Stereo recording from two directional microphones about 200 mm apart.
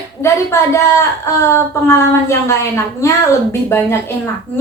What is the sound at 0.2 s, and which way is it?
A woman's voice, 15° left (ahead or behind).